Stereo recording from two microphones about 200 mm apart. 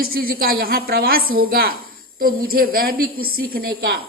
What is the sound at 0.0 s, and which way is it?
A woman's voice, 45° right (ahead or behind).